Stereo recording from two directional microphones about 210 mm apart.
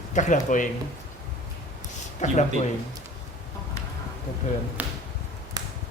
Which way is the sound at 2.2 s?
35° left (ahead or behind).